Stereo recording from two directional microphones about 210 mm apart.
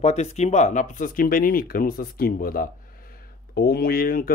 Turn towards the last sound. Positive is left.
turn(degrees=45)  # may be behind; listen again after turning